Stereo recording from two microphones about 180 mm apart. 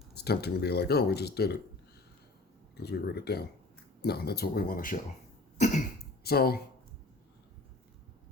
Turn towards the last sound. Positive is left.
turn(degrees=60)  # may be behind; listen again after turning